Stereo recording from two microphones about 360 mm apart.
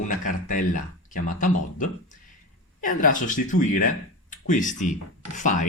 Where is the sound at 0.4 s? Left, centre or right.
Left.